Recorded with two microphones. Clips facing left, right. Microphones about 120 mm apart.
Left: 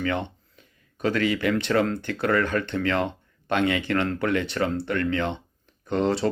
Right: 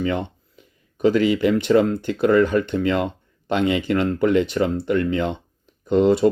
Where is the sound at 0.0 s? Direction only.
20° right (ahead or behind).